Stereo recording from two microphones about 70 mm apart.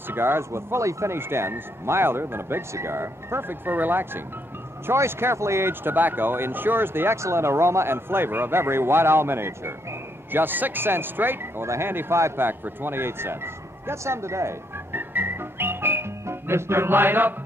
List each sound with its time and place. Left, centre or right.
0.1 s speech: right